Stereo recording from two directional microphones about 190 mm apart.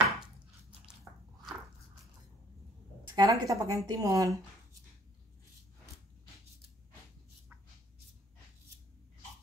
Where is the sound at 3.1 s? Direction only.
20° right (ahead or behind).